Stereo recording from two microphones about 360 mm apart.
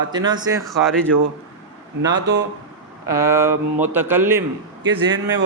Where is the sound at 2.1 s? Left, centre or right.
Right.